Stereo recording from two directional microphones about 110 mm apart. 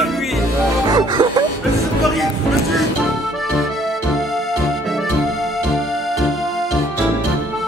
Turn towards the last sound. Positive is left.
turn(degrees=0)  # may be behind; listen again after turning